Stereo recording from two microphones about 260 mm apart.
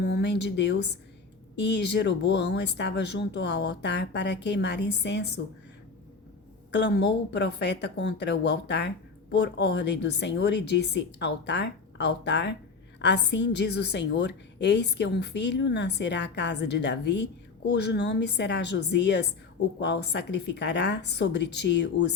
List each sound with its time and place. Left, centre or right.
0.0 s a woman's voice: left
6.7 s a woman's voice: left